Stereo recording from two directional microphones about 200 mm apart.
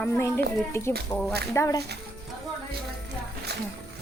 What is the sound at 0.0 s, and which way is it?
A woman's voice, 15° left (ahead or behind).